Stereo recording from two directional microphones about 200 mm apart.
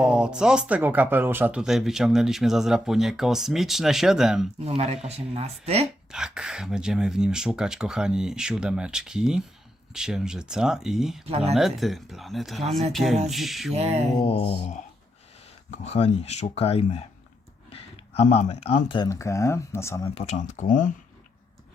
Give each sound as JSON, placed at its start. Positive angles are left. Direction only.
{"t": 0.0, "sound": "speech", "side_deg": -5}
{"t": 5.0, "sound": "speech", "side_deg": -30}
{"t": 6.1, "sound": "speech", "side_deg": -5}
{"t": 11.3, "sound": "speech", "side_deg": -30}
{"t": 11.5, "sound": "speech", "side_deg": 0}
{"t": 13.7, "sound": "speech", "side_deg": -30}
{"t": 14.3, "sound": "speech", "side_deg": 30}
{"t": 20.1, "sound": "speech", "side_deg": 35}